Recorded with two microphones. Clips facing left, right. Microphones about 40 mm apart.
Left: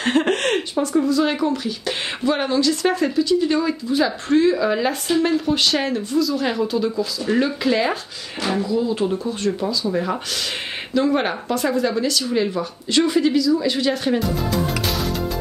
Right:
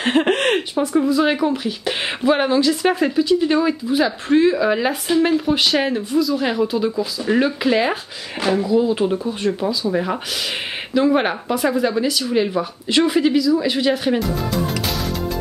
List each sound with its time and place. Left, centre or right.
0.0 s speech: centre